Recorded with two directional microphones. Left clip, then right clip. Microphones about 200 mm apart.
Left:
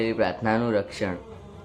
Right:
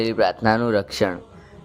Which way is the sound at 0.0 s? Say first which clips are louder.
Right 5 dB; 40° right (ahead or behind).